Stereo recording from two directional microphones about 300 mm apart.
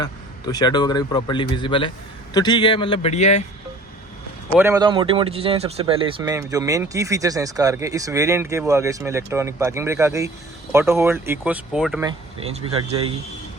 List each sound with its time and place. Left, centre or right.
0.0 s speech: centre
4.5 s speech: centre